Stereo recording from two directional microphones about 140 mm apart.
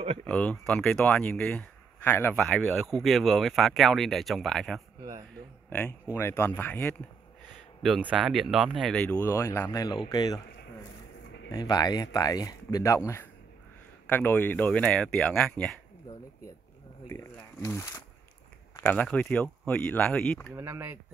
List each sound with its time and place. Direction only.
0.2 s speech: 10° left (ahead or behind)
2.4 s speech: 5° left (ahead or behind)
5.7 s speech: 15° left (ahead or behind)
8.0 s speech: 5° right (ahead or behind); by 10.4 s 30° left (ahead or behind)
11.5 s speech: 30° left (ahead or behind); by 15.7 s 5° left (ahead or behind)
16.1 s a sound: 30° left (ahead or behind)
17.1 s speech: 20° left (ahead or behind)
20.5 s speech: 20° right (ahead or behind)